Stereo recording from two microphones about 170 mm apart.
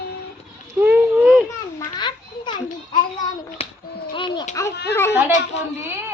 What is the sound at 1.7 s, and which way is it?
Children playing, 25° left (ahead or behind).